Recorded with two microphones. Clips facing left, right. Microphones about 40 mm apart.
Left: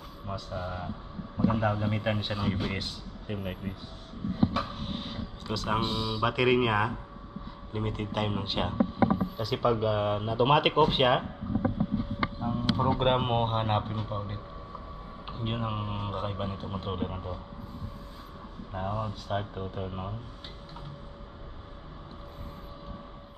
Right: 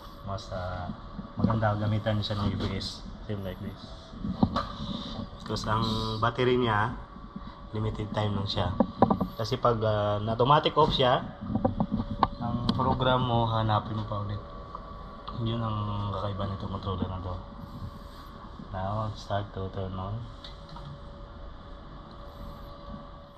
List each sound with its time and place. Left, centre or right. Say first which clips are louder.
0.3 s a man's voice: even; left
4.6 s a sound: even; left
5.5 s a man's voice: even; left
12.4 s speech: even; left
18.9 s a man's voice: even; left
19.3 s speech: even; left